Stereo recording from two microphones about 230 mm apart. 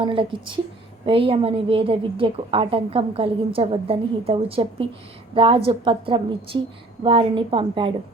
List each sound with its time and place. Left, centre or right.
0.0 s a woman's voice: right